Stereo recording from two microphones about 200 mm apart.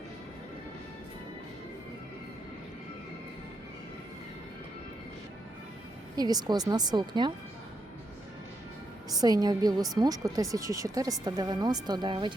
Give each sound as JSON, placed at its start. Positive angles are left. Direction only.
{"t": 6.1, "sound": "a woman's voice", "side_deg": -20}
{"t": 9.0, "sound": "a woman's voice", "side_deg": -20}